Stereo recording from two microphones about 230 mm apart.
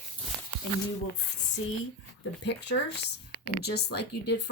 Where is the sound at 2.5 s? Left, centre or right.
Left.